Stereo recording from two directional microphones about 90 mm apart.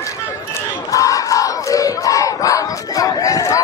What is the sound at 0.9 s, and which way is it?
Crowd, 40° left (ahead or behind).